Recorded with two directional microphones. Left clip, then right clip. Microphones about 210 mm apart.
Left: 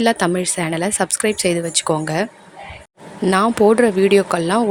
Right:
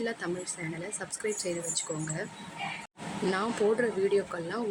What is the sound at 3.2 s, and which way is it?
A woman's voice, 40° left (ahead or behind).